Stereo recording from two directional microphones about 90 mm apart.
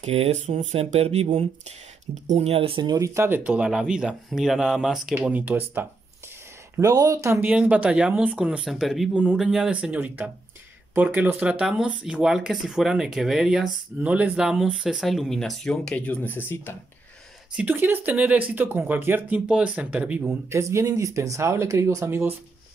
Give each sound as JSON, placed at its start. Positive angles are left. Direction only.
{"t": 0.7, "sound": "speech", "side_deg": -90}
{"t": 2.6, "sound": "speech", "side_deg": -70}
{"t": 3.2, "sound": "speech", "side_deg": -20}
{"t": 5.1, "sound": "speech", "side_deg": -15}
{"t": 6.8, "sound": "speech", "side_deg": -40}
{"t": 7.4, "sound": "speech", "side_deg": -15}
{"t": 8.6, "sound": "speech", "side_deg": 0}
{"t": 9.1, "sound": "speech", "side_deg": -20}
{"t": 9.4, "sound": "speech", "side_deg": -10}
{"t": 14.0, "sound": "speech", "side_deg": -15}
{"t": 17.6, "sound": "speech", "side_deg": -20}
{"t": 20.2, "sound": "speech", "side_deg": -30}